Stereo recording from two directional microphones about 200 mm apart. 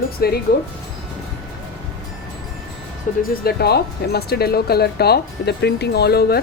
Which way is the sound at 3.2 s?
50° left (ahead or behind).